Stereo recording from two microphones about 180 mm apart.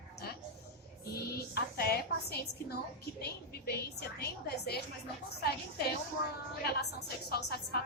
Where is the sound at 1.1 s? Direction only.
60° left (ahead or behind).